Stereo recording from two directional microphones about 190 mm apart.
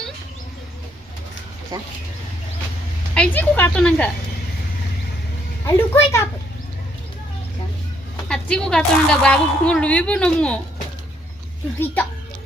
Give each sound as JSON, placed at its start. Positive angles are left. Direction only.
{"t": 1.7, "sound": "speech", "side_deg": -20}
{"t": 3.2, "sound": "speech", "side_deg": 10}
{"t": 5.6, "sound": "speech", "side_deg": 15}
{"t": 8.3, "sound": "a woman's voice", "side_deg": 5}